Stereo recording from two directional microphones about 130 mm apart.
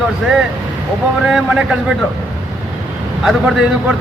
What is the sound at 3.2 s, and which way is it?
Speech, 5° right (ahead or behind).